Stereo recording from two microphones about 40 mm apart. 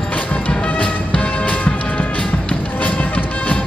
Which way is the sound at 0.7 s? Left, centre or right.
Left.